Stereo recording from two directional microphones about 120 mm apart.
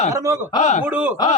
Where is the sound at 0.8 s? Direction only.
10° right (ahead or behind).